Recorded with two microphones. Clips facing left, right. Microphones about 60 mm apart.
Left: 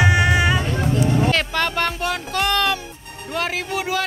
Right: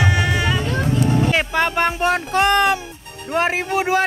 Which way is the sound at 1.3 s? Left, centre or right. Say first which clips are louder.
Right 2 dB; centre.